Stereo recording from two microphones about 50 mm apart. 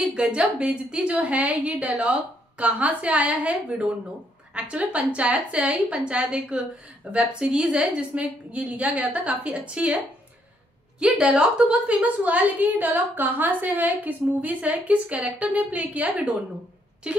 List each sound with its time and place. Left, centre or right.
0.1 s a woman's voice: centre
11.0 s a woman's voice: centre
12.0 s a woman's voice: right